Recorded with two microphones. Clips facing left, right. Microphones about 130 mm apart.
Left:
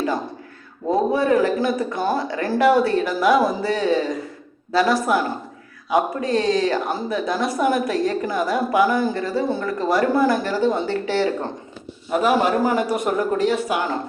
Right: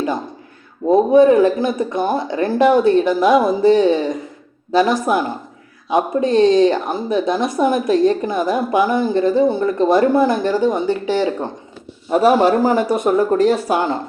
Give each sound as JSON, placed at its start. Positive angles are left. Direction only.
{"t": 0.9, "sound": "speech", "side_deg": -20}
{"t": 12.1, "sound": "a man's voice", "side_deg": -35}
{"t": 13.3, "sound": "a man's voice", "side_deg": -40}